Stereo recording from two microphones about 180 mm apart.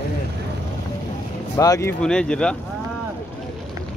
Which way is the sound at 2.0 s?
5° left (ahead or behind).